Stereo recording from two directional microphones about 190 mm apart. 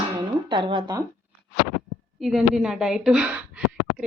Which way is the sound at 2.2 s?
Centre (ahead or behind).